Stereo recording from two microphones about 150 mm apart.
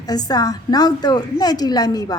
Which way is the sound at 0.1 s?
25° left (ahead or behind).